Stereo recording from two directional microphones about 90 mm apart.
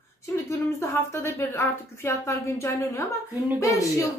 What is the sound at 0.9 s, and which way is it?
A woman's voice, 30° left (ahead or behind).